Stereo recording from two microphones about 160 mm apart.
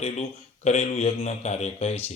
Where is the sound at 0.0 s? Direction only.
45° left (ahead or behind).